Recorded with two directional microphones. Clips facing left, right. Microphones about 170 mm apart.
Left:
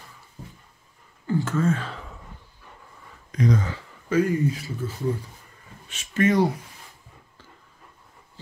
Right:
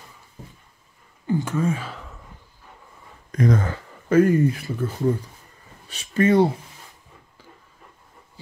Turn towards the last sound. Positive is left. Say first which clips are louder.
# right 3 dB
turn(degrees=-30)  # may be behind; listen again after turning